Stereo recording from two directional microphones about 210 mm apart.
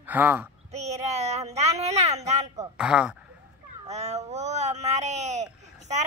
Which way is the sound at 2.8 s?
5° right (ahead or behind).